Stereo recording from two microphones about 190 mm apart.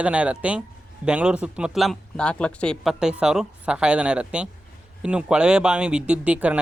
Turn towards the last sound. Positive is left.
turn(degrees=-5)  # may be behind; listen again after turning